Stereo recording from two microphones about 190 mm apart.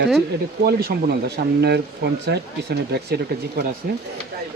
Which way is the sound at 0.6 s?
55° right (ahead or behind).